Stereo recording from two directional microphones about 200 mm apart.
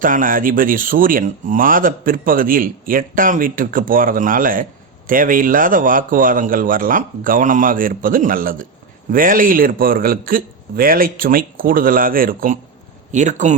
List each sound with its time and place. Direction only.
0.0 s speech: 45° right (ahead or behind)